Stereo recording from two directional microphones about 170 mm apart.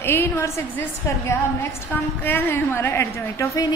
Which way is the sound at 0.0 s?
15° left (ahead or behind).